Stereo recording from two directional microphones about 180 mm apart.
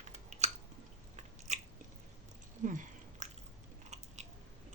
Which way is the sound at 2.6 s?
45° right (ahead or behind).